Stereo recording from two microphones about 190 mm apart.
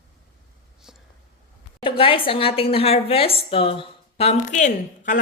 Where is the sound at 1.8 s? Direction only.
30° left (ahead or behind).